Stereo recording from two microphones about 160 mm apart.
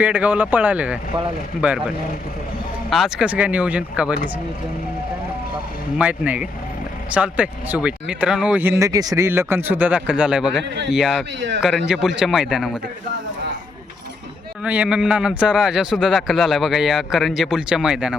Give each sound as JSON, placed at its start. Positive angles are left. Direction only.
{"t": 0.0, "sound": "speech", "side_deg": -10}
{"t": 2.9, "sound": "speech", "side_deg": -5}
{"t": 6.0, "sound": "a man's voice", "side_deg": -10}
{"t": 11.3, "sound": "speech", "side_deg": -90}
{"t": 11.6, "sound": "a man's voice", "side_deg": -5}
{"t": 14.6, "sound": "a man's voice", "side_deg": -10}